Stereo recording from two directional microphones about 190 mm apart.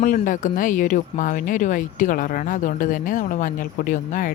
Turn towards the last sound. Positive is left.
turn(degrees=45)  # may be behind; listen again after turning